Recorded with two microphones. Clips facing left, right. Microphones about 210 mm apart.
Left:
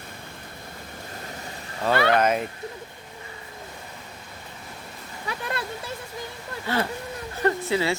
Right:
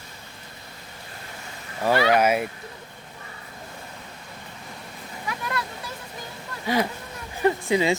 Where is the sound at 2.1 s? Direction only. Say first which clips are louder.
Right 1 dB; 10° right (ahead or behind).